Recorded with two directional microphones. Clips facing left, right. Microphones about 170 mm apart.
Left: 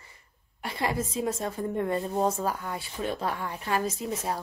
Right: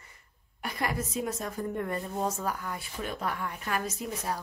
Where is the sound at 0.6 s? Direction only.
30° left (ahead or behind).